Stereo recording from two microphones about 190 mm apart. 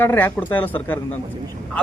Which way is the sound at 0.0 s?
10° left (ahead or behind).